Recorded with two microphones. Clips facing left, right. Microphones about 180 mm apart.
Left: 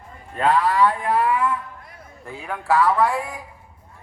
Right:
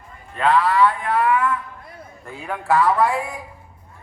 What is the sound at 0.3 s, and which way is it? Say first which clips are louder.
Speech: right 1 dB; 40° left (ahead or behind).